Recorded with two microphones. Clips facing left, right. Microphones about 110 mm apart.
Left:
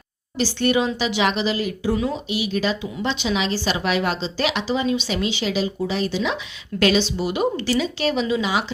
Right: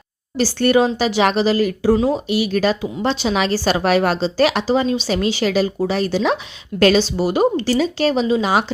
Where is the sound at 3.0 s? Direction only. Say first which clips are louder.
Right 4 dB; 40° right (ahead or behind).